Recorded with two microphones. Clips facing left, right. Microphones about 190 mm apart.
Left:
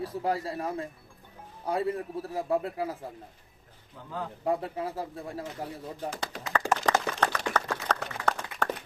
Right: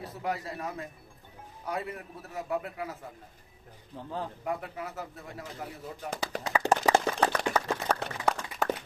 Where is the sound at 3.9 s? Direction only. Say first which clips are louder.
Right 5 dB; 35° right (ahead or behind).